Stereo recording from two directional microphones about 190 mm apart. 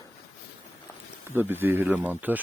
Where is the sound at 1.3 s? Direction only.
10° right (ahead or behind).